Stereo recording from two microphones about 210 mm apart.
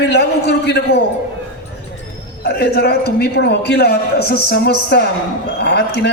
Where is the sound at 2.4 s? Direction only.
50° left (ahead or behind).